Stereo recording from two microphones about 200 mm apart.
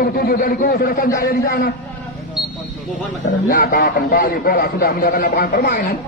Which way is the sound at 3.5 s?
45° left (ahead or behind).